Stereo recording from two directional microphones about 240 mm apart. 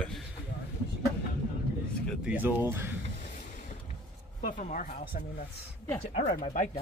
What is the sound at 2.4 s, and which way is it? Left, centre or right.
Speech, centre.